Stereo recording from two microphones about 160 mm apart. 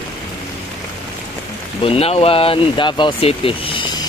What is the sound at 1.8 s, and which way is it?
Speech, 40° left (ahead or behind).